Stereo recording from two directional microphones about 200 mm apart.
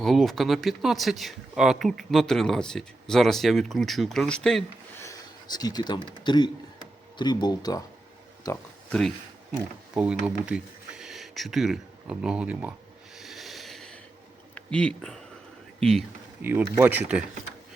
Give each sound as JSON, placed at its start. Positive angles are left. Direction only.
{"t": 0.0, "sound": "speech", "side_deg": 0}
{"t": 5.0, "sound": "speech", "side_deg": 20}
{"t": 8.9, "sound": "speech", "side_deg": 0}
{"t": 13.1, "sound": "a sound", "side_deg": 0}
{"t": 14.5, "sound": "speech", "side_deg": 5}
{"t": 16.4, "sound": "speech", "side_deg": -10}